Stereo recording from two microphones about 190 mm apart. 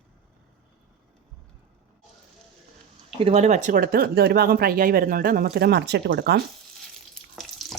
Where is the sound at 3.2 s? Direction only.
35° right (ahead or behind); by 6.3 s 60° right (ahead or behind).